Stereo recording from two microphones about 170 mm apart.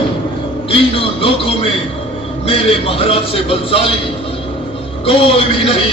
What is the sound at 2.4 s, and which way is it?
A man's voice, 35° left (ahead or behind).